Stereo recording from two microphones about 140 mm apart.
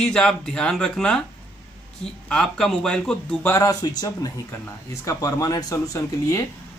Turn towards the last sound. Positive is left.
turn(degrees=20)  # may be behind; listen again after turning